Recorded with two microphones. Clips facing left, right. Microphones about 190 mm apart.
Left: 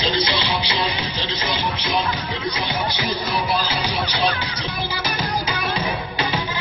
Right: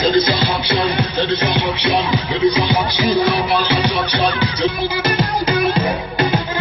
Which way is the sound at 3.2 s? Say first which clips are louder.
Right 6 dB; 70° right (ahead or behind).